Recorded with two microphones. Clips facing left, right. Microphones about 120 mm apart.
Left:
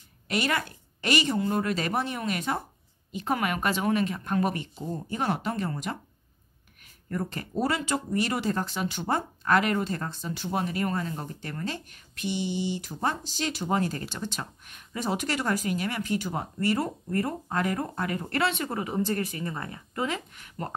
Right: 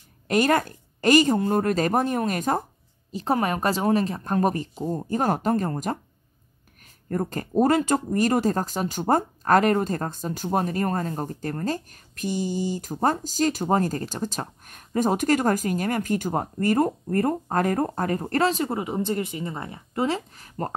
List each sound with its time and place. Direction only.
0.3 s speech: 45° right (ahead or behind)
18.7 s speech: 20° right (ahead or behind); by 20.7 s 35° right (ahead or behind)